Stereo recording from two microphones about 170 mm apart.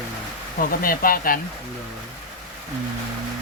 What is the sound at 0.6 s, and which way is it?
Speech, 55° left (ahead or behind).